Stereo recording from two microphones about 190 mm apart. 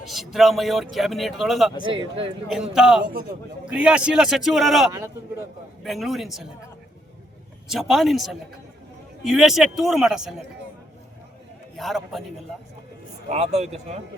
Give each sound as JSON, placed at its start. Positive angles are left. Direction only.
{"t": 0.0, "sound": "speech", "side_deg": 0}
{"t": 1.8, "sound": "a man's voice", "side_deg": -25}
{"t": 2.5, "sound": "speech", "side_deg": 0}
{"t": 3.0, "sound": "a man's voice", "side_deg": -50}
{"t": 3.7, "sound": "speech", "side_deg": -5}
{"t": 4.9, "sound": "speech", "side_deg": -15}
{"t": 5.8, "sound": "speech", "side_deg": 0}
{"t": 7.7, "sound": "speech", "side_deg": 0}
{"t": 11.8, "sound": "speech", "side_deg": 0}
{"t": 13.2, "sound": "speech", "side_deg": -35}